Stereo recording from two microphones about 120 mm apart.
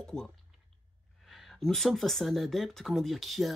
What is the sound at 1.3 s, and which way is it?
Speech, centre (ahead or behind).